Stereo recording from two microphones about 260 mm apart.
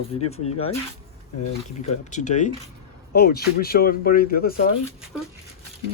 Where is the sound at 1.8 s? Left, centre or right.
Left.